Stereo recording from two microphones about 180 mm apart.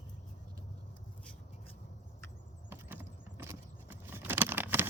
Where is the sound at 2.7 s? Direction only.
10° right (ahead or behind).